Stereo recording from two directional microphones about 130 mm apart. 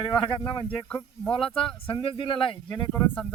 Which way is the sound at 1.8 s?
45° left (ahead or behind).